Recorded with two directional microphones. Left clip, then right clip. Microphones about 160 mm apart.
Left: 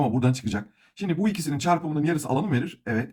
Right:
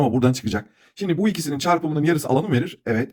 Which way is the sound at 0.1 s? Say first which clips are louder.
Right 5 dB; 40° right (ahead or behind).